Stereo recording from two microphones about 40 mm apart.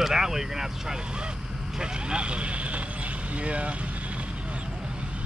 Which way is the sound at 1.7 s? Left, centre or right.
Right.